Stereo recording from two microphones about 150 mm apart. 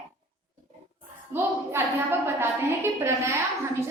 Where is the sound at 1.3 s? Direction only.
15° right (ahead or behind).